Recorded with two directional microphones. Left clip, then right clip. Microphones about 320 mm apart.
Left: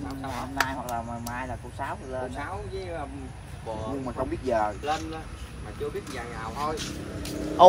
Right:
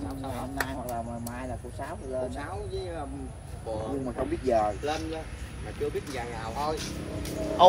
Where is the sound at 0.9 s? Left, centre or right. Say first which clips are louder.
Left 3 dB; left.